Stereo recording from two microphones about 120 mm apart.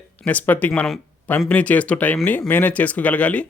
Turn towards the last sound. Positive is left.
turn(degrees=10)  # may be behind; listen again after turning